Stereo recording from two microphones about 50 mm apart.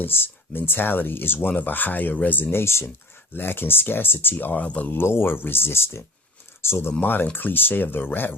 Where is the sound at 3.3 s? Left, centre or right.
Left.